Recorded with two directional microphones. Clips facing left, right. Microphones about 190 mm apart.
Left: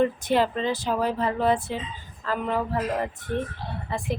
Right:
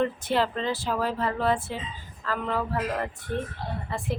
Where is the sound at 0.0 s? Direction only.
15° left (ahead or behind).